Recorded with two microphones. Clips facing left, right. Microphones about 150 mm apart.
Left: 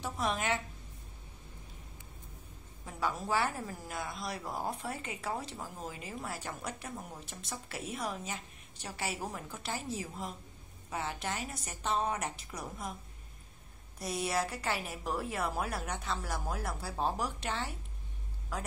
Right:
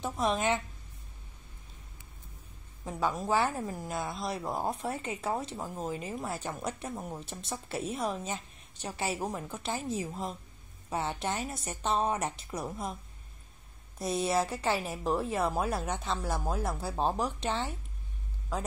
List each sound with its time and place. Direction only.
0.0 s a woman's voice: 25° right (ahead or behind)
2.8 s a woman's voice: 25° right (ahead or behind)
13.9 s a woman's voice: 25° right (ahead or behind)